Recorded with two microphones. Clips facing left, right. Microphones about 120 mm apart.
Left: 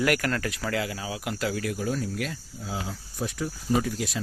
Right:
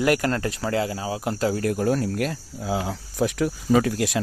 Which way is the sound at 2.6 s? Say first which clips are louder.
Right 8 dB; 70° right (ahead or behind).